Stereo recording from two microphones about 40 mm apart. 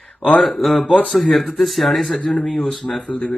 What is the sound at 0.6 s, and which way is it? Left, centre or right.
Speech, centre.